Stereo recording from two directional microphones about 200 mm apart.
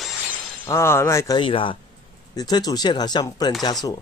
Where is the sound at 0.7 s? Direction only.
15° left (ahead or behind).